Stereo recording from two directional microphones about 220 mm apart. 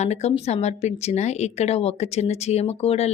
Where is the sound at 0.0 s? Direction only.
30° left (ahead or behind).